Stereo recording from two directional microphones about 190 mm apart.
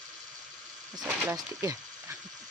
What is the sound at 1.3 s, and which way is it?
Speech, 15° right (ahead or behind).